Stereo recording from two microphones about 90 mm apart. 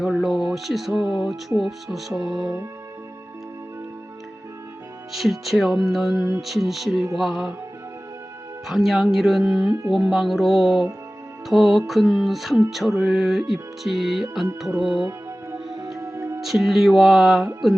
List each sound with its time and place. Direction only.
0.0 s music: centre (ahead or behind)
5.1 s music: centre (ahead or behind)
8.6 s music: 5° right (ahead or behind)
16.0 s music: 35° right (ahead or behind)
16.4 s music: centre (ahead or behind)